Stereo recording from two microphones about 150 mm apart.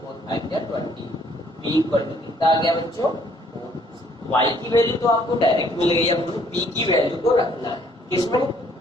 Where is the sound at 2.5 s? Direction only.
30° left (ahead or behind).